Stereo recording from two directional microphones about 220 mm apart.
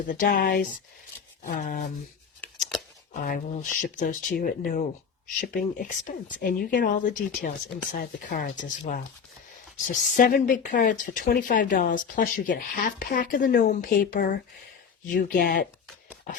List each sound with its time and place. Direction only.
0.1 s speech: 45° left (ahead or behind)
2.4 s a sound: centre (ahead or behind)
3.1 s speech: 40° left (ahead or behind)